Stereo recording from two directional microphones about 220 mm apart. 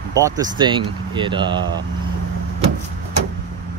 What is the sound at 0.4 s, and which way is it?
Speech, 20° right (ahead or behind).